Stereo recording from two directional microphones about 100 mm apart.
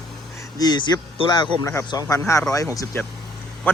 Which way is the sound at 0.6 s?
45° left (ahead or behind).